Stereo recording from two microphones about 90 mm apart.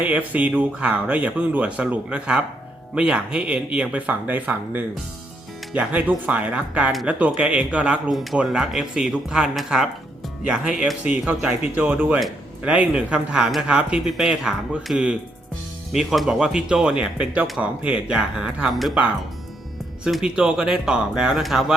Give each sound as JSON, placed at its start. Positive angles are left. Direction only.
{"t": 0.0, "sound": "speech", "side_deg": -20}
{"t": 8.1, "sound": "speech", "side_deg": 0}
{"t": 20.1, "sound": "speech", "side_deg": -5}